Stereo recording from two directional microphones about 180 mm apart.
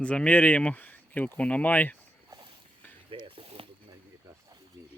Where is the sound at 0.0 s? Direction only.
5° left (ahead or behind).